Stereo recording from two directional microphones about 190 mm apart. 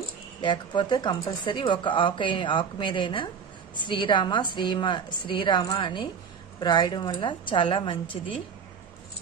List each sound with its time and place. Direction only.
0.4 s speech: 25° left (ahead or behind)